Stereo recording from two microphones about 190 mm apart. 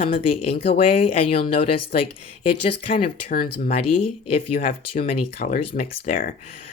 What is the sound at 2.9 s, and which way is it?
Speech, 45° left (ahead or behind).